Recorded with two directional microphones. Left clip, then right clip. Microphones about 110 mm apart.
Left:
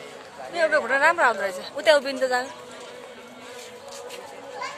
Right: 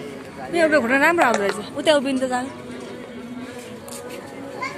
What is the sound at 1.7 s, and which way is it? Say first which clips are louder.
Speech: even; 50° left (ahead or behind).